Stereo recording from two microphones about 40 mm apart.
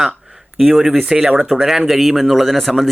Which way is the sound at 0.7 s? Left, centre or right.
Centre.